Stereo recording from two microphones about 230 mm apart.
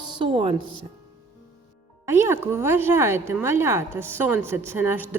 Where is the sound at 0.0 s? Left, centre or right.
Centre.